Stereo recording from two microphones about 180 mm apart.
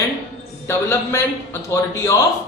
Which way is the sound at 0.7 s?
15° left (ahead or behind).